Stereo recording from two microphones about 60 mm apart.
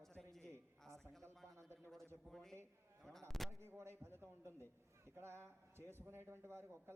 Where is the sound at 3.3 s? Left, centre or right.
Centre.